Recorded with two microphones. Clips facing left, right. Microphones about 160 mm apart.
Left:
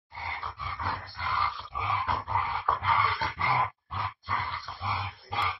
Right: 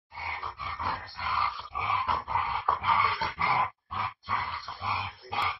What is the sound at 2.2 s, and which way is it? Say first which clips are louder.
Dog: even; 20° right (ahead or behind).